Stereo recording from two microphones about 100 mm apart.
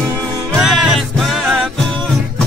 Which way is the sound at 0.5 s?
5° right (ahead or behind).